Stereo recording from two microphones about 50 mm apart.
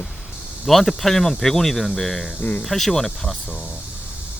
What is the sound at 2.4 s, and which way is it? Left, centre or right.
Speech, left.